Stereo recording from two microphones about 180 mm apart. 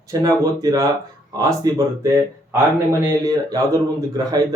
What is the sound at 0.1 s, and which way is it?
A man's voice, 20° right (ahead or behind).